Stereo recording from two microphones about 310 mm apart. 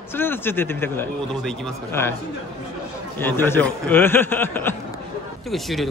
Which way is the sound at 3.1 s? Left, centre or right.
Centre.